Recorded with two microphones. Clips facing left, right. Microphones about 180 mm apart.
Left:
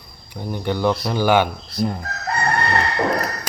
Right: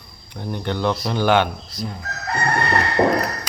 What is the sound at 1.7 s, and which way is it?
Speech, 60° left (ahead or behind).